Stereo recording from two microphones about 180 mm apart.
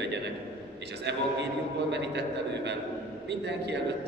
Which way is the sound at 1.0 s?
70° right (ahead or behind).